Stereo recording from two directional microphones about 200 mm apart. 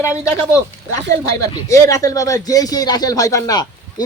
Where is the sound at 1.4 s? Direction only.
20° left (ahead or behind).